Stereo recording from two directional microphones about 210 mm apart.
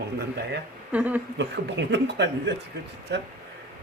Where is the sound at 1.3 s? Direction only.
55° right (ahead or behind).